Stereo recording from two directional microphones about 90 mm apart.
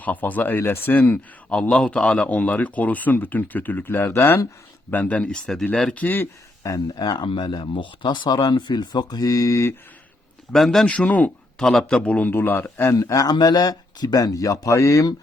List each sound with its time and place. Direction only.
0.0 s speech: 20° left (ahead or behind)
1.5 s speech: 10° left (ahead or behind); by 4.4 s 30° left (ahead or behind)
4.9 s speech: 20° left (ahead or behind)
6.6 s speech: 40° left (ahead or behind)
7.3 s speech: 60° left (ahead or behind); by 9.7 s 35° left (ahead or behind)
10.5 s a man's voice: 5° left (ahead or behind)
10.8 s speech: 15° left (ahead or behind)
11.6 s speech: 5° left (ahead or behind); by 13.0 s 25° left (ahead or behind)
13.0 s a man's voice: 40° left (ahead or behind)